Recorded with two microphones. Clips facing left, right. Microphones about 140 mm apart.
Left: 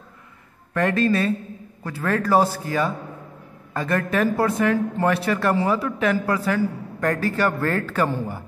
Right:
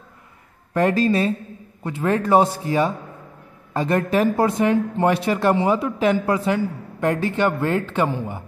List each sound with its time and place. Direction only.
0.7 s a man's voice: 30° right (ahead or behind)